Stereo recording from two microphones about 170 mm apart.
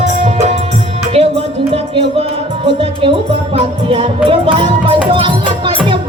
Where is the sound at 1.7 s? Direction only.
35° right (ahead or behind).